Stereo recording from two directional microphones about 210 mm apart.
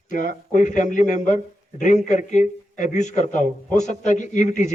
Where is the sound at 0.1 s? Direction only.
35° left (ahead or behind).